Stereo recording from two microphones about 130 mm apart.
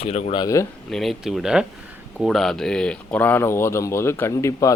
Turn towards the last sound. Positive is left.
turn(degrees=20)  # may be behind; listen again after turning